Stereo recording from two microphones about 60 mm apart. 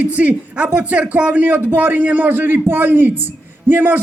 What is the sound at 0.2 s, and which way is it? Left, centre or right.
A man's voice, right.